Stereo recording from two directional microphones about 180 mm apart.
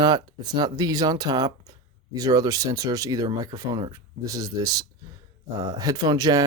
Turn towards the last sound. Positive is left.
turn(degrees=-20)  # may be behind; listen again after turning